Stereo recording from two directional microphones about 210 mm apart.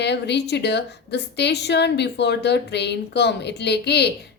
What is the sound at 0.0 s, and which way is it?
A woman's voice, 55° left (ahead or behind).